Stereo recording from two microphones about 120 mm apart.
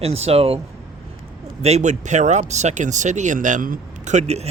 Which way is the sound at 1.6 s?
70° right (ahead or behind).